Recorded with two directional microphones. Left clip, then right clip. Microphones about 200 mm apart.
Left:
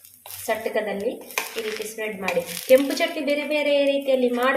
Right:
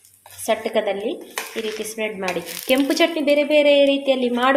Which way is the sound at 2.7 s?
45° right (ahead or behind).